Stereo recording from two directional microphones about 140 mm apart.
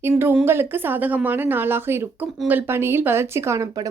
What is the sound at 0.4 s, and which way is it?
A woman's voice, 15° right (ahead or behind).